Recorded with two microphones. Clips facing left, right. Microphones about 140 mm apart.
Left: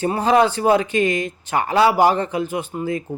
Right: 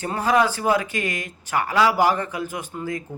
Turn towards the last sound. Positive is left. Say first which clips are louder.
# left 5 dB
turn(degrees=20)  # may be behind; listen again after turning